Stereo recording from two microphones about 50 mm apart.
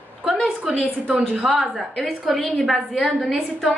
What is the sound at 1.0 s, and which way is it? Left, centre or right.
Speech, right.